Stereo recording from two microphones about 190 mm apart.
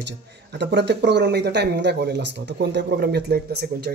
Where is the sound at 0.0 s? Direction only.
65° right (ahead or behind).